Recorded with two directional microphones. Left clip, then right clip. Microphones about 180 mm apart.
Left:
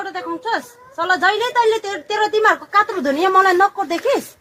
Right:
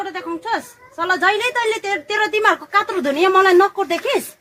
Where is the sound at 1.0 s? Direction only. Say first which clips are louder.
Even; 40° right (ahead or behind); by 4.2 s 55° right (ahead or behind).